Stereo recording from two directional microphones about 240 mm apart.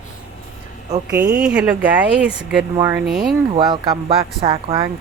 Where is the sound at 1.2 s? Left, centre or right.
Centre.